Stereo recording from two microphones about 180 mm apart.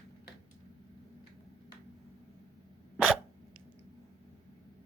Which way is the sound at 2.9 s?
Centre (ahead or behind).